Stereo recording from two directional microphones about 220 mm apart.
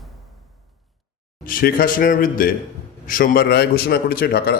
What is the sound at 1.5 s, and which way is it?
A man's voice, 40° left (ahead or behind).